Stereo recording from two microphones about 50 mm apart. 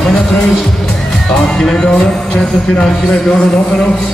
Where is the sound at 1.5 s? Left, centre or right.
Centre.